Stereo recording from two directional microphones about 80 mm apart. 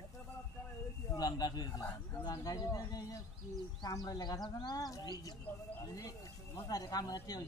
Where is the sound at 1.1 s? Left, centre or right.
Left.